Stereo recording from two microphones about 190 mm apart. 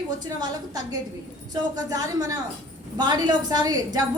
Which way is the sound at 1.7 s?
20° right (ahead or behind).